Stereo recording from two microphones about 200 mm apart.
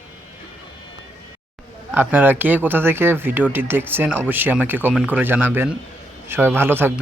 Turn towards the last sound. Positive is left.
turn(degrees=-10)  # may be behind; listen again after turning